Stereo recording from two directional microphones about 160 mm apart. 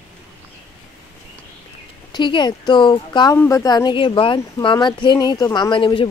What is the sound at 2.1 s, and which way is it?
Speech, 30° left (ahead or behind).